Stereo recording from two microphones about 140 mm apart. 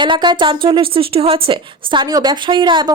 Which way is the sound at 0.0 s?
35° right (ahead or behind).